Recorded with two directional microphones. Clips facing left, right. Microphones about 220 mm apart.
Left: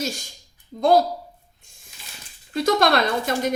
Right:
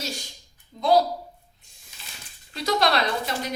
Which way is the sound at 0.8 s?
50° left (ahead or behind).